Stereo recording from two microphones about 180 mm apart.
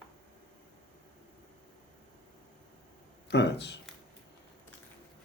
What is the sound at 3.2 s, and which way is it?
Speech, 70° left (ahead or behind).